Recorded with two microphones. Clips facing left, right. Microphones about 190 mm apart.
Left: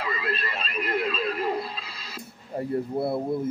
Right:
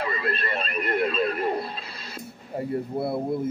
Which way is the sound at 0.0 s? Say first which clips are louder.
Right 2 dB; 50° right (ahead or behind).